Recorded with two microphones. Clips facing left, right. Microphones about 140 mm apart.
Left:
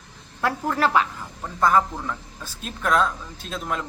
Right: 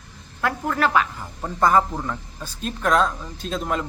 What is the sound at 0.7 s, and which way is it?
Speech, 25° left (ahead or behind).